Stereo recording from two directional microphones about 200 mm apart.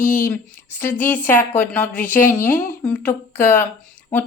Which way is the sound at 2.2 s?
45° left (ahead or behind).